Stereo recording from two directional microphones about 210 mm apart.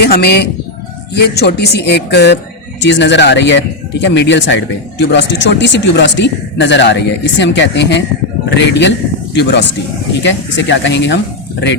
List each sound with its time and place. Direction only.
0.0 s speech: 50° left (ahead or behind)